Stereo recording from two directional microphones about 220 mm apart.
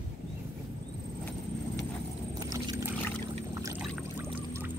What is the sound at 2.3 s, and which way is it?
Boat, 20° right (ahead or behind).